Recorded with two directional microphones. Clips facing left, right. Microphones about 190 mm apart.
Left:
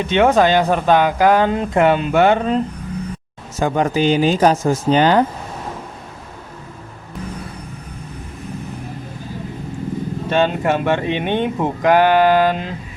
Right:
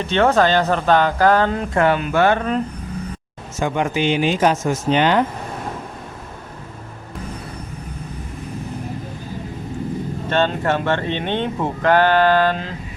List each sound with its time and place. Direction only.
0.0 s speech: 15° left (ahead or behind)
3.6 s speech: 40° left (ahead or behind)
10.2 s speech: 10° left (ahead or behind)